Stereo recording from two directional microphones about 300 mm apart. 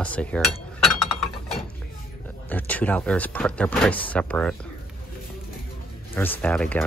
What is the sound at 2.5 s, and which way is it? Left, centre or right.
Speech, centre.